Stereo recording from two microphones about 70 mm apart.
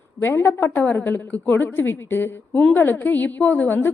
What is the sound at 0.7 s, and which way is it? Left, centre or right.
A woman's voice, left.